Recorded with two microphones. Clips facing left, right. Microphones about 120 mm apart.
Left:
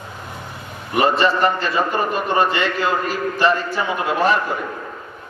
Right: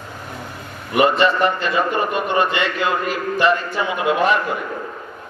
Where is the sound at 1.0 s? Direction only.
35° left (ahead or behind).